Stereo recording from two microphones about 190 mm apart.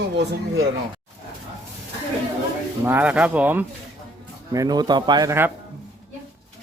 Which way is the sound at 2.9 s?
10° right (ahead or behind).